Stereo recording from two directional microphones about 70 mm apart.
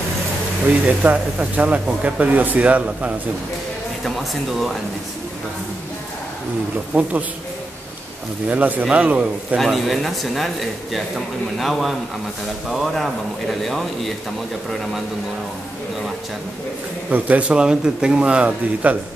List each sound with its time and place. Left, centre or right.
0.7 s speech: centre
7.0 s speech: right
8.5 s speech: right
9.6 s speech: centre
17.1 s speech: right